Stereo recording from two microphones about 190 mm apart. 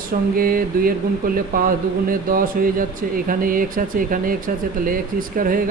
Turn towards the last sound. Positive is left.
turn(degrees=-45)  # may be behind; listen again after turning